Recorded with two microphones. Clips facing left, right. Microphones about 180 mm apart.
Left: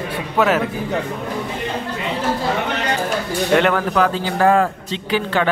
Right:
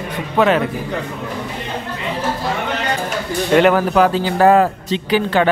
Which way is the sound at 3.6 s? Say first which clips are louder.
Right 4 dB; 10° right (ahead or behind).